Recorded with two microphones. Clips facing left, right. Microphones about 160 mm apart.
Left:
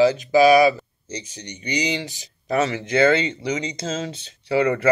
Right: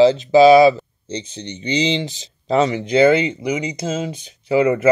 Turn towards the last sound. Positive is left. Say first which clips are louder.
# right 4 dB
turn(degrees=-20)  # may be behind; listen again after turning